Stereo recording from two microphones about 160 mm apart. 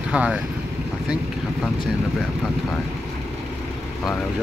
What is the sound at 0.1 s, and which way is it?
Speech, 10° right (ahead or behind).